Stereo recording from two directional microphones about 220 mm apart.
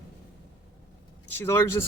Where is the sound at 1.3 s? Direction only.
10° left (ahead or behind).